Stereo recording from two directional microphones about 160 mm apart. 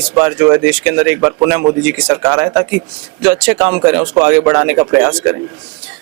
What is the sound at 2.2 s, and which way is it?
Speech, 20° right (ahead or behind).